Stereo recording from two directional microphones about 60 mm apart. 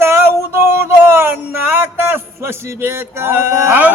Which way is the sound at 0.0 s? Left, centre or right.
Right.